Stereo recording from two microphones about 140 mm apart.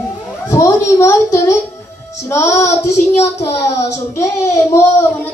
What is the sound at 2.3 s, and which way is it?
Child singing, 15° left (ahead or behind).